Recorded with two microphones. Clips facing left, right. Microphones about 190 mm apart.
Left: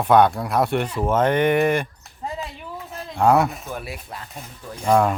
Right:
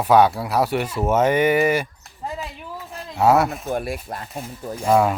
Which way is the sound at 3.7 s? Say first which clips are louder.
Right 7 dB; 45° right (ahead or behind).